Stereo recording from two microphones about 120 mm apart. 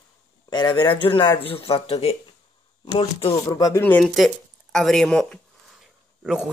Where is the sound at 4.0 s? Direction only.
Centre (ahead or behind).